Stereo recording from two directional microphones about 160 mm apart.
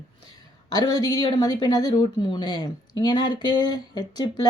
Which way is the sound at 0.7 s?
25° left (ahead or behind).